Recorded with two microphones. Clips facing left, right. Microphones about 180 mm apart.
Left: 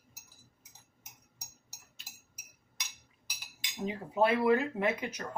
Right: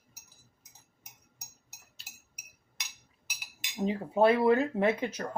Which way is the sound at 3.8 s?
30° right (ahead or behind).